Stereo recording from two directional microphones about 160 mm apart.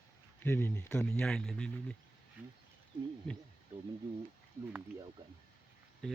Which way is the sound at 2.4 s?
10° right (ahead or behind).